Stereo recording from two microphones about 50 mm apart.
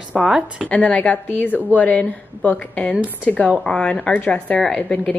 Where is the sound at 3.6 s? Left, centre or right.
Left.